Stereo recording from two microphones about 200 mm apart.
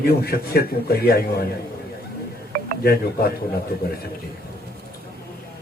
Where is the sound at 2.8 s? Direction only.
50° left (ahead or behind).